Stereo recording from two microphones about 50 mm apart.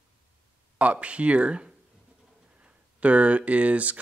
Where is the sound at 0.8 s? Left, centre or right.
Right.